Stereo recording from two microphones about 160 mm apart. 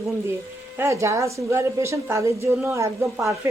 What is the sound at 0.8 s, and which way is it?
A woman's voice, 20° right (ahead or behind).